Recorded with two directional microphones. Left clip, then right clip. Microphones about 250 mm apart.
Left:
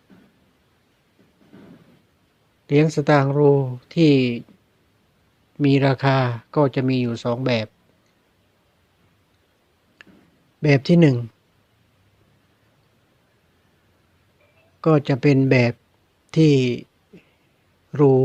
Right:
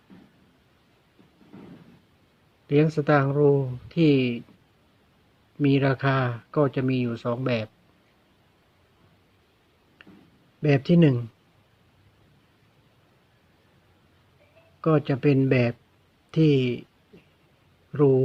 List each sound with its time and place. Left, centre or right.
2.6 s speech: left
5.5 s speech: left
10.0 s a sound: left
10.6 s speech: left
14.8 s speech: left
17.9 s speech: left